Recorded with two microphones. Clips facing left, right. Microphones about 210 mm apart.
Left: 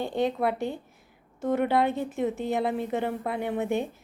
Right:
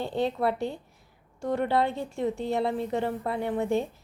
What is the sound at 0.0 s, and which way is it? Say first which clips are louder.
A woman's voice: left 1 dB; 15° left (ahead or behind).